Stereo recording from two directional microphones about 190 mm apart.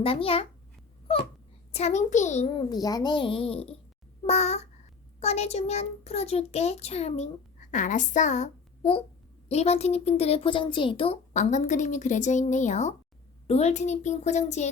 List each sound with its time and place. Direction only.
0.0 s a child's voice: 30° left (ahead or behind)
1.7 s speech: 35° left (ahead or behind)
2.6 s a child's voice: 20° left (ahead or behind); by 14.7 s 35° left (ahead or behind)